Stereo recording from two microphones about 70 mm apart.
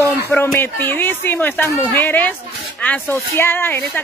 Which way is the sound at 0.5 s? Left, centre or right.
Left.